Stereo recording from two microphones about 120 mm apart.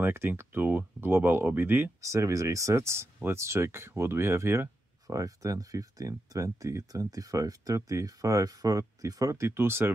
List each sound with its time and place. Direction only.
0.0 s speech: 20° right (ahead or behind)